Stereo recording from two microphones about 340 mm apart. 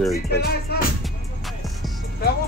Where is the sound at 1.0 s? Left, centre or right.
Centre.